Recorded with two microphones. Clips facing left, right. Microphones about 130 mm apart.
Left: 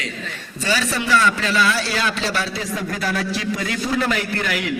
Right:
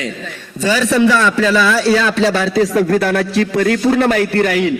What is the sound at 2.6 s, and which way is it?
A man's voice, 65° right (ahead or behind).